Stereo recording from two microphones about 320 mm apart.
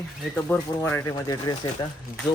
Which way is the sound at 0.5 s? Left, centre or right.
Centre.